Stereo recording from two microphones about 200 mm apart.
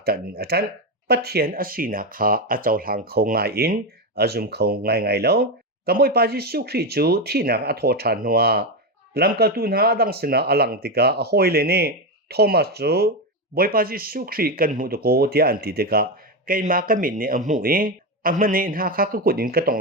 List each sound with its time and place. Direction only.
0.0 s speech: 50° right (ahead or behind)